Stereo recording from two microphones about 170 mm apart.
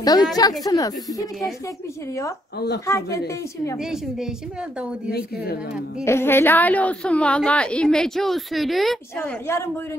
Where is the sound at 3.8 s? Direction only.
5° right (ahead or behind).